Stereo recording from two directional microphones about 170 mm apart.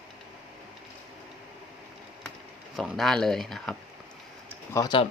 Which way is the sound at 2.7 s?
Centre (ahead or behind).